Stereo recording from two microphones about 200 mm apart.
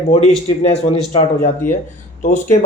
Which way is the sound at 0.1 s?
35° left (ahead or behind).